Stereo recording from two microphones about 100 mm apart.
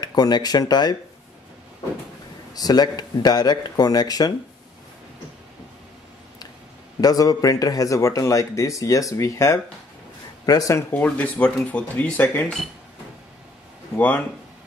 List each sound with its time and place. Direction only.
0.0 s speech: 45° left (ahead or behind)
2.5 s a man's voice: 40° left (ahead or behind)
7.0 s a man's voice: 40° left (ahead or behind)
10.9 s speech: 15° left (ahead or behind)
13.9 s speech: 15° left (ahead or behind)